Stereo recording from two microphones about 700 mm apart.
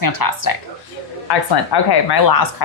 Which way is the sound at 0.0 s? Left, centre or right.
Left.